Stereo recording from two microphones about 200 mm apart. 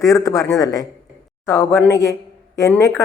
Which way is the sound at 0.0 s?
15° left (ahead or behind).